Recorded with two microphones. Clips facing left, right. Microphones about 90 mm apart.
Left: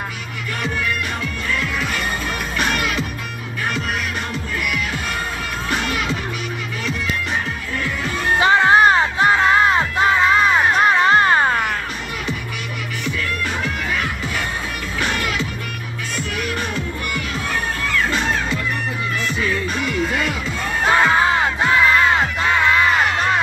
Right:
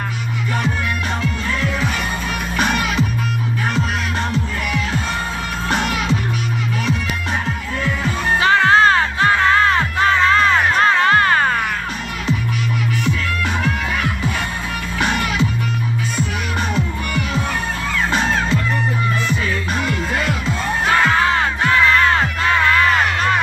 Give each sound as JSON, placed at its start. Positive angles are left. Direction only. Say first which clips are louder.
{"t": 8.4, "sound": "music", "louder": "even", "side_deg": 20}
{"t": 20.8, "sound": "music", "louder": "left 1 dB", "side_deg": 20}